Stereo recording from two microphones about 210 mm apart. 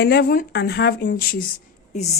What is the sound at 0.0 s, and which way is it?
Speech, 50° left (ahead or behind).